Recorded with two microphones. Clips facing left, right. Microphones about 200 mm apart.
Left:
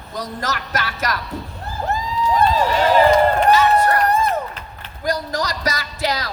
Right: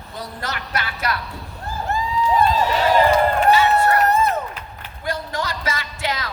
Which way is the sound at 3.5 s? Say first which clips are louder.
Left 1 dB; 40° left (ahead or behind).